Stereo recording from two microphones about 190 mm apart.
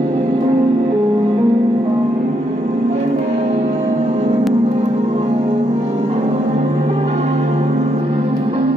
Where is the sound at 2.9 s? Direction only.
35° right (ahead or behind).